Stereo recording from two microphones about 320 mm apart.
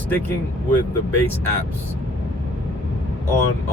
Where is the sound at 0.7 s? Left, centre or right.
Centre.